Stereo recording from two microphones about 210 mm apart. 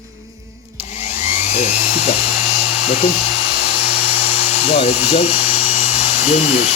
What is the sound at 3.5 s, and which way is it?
Dental drill, 50° left (ahead or behind).